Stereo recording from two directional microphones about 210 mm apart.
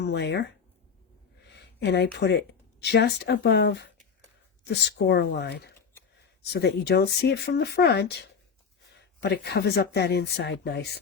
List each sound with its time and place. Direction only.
0.0 s speech: 55° left (ahead or behind)
1.4 s a sound: 55° left (ahead or behind)
2.1 s speech: 50° left (ahead or behind)
9.2 s speech: 50° left (ahead or behind)